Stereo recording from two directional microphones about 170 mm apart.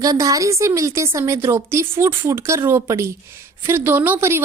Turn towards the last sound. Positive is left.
turn(degrees=-15)  # may be behind; listen again after turning